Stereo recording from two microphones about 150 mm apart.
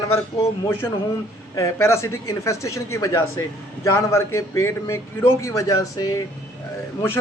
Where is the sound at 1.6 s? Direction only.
20° left (ahead or behind).